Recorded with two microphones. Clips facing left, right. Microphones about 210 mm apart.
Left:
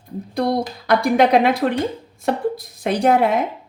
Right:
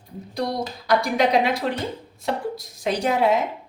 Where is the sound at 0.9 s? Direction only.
55° left (ahead or behind).